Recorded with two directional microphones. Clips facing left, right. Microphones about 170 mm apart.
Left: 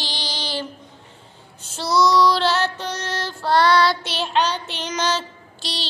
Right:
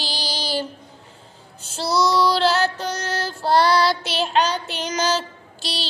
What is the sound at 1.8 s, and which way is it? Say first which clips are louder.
Child singing: left 2 dB; 30° right (ahead or behind).